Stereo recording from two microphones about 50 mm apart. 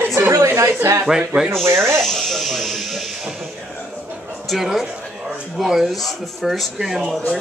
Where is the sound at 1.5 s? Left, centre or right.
Right.